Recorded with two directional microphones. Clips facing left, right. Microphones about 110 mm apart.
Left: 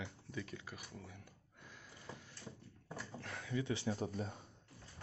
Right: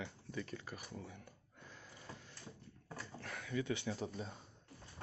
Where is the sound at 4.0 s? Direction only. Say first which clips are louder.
Left 2 dB; 45° left (ahead or behind).